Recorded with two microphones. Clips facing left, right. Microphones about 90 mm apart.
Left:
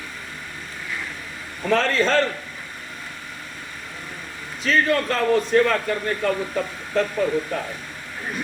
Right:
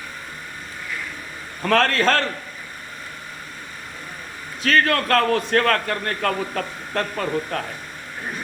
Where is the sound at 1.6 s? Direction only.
60° right (ahead or behind).